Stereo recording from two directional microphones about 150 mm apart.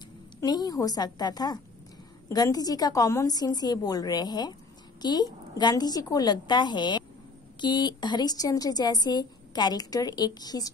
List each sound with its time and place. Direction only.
0.4 s a woman's voice: 25° left (ahead or behind)